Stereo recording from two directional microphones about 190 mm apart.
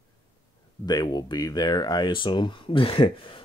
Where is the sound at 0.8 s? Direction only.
20° left (ahead or behind).